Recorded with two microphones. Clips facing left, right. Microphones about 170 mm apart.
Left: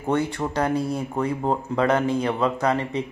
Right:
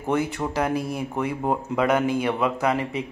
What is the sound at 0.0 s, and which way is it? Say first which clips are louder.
Speech: left 1 dB; 5° right (ahead or behind).